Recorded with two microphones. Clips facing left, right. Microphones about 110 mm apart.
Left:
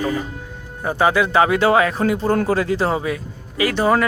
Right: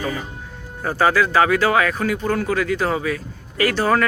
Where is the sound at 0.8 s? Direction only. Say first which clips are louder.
Left 1 dB; 20° left (ahead or behind).